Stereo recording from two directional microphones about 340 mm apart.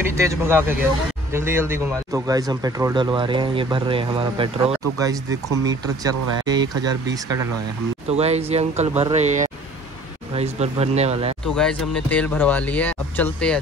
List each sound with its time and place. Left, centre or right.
0.0 s speech: centre
8.1 s speech: centre
11.4 s speech: centre